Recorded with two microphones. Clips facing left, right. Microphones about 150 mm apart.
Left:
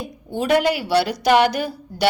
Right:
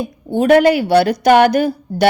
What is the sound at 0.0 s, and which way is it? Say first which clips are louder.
A woman's voice: right 8 dB; 50° right (ahead or behind).